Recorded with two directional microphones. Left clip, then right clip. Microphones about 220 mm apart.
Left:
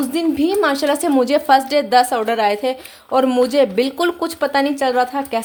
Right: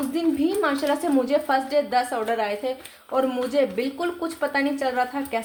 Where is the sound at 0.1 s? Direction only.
45° left (ahead or behind).